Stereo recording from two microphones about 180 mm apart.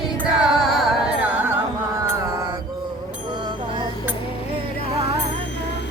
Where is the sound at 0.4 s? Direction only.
Centre (ahead or behind).